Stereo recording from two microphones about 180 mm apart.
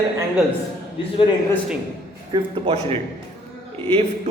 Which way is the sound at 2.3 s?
35° right (ahead or behind).